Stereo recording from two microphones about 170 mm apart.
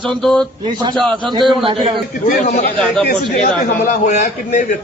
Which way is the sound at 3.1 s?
50° left (ahead or behind).